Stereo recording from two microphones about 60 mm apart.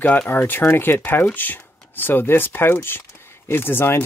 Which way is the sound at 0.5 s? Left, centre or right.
Left.